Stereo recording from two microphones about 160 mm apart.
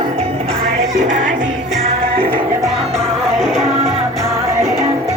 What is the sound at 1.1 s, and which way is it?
Music, 50° right (ahead or behind).